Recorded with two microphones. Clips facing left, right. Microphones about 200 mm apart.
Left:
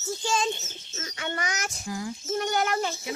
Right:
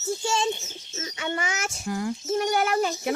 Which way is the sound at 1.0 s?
25° right (ahead or behind).